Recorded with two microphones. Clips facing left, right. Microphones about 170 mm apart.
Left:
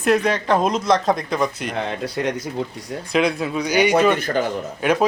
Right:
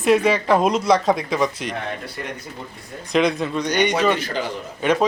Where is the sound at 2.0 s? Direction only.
90° left.